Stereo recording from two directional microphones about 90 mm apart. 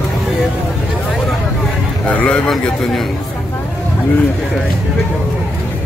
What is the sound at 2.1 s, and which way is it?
Speech, 15° left (ahead or behind).